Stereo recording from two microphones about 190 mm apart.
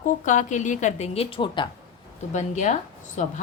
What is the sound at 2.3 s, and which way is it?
Speech, 40° left (ahead or behind).